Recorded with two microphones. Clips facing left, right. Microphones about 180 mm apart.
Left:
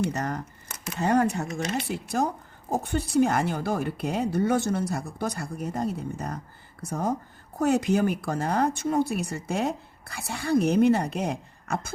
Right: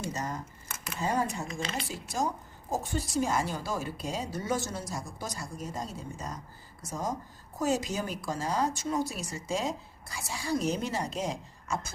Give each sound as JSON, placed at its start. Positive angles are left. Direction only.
{"t": 0.0, "sound": "speech", "side_deg": 65}